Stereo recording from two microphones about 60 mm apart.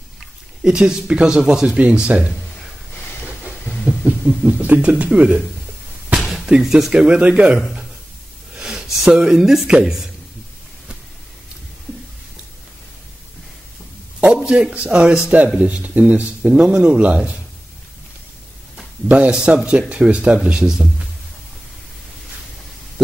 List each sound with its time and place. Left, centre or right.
0.7 s speech: centre
4.0 s a sound: right
4.5 s speech: right
6.2 s a sound: centre
6.9 s speech: centre
8.5 s a sound: centre
9.8 s speech: centre
14.2 s a man's voice: centre
16.4 s speech: centre
19.0 s speech: right